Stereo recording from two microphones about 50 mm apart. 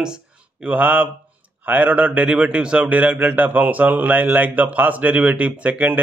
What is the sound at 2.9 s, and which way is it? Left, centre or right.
A man's voice, right.